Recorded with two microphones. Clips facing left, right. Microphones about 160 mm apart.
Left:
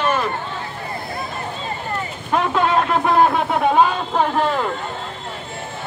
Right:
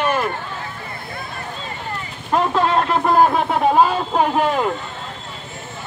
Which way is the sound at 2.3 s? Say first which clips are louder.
Right 1 dB; centre (ahead or behind).